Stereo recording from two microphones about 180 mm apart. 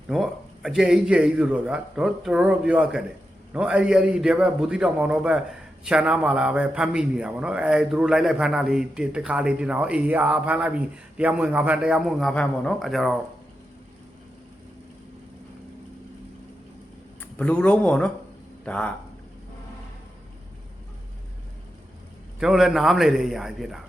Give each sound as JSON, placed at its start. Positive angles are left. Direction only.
{"t": 0.1, "sound": "a man's voice", "side_deg": 0}
{"t": 17.3, "sound": "speech", "side_deg": 5}
{"t": 22.4, "sound": "a man's voice", "side_deg": 0}